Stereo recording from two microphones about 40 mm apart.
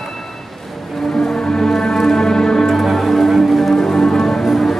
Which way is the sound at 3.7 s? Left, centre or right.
Centre.